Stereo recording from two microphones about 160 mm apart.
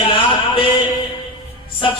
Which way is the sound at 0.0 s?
30° left (ahead or behind).